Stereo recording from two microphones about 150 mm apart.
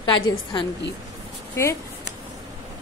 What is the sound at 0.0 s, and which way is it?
Speech, 30° left (ahead or behind).